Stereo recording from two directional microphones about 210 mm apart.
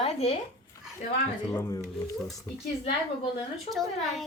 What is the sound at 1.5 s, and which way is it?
Speech, 15° left (ahead or behind).